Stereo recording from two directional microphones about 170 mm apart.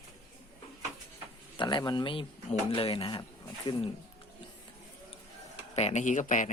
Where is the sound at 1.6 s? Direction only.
25° left (ahead or behind).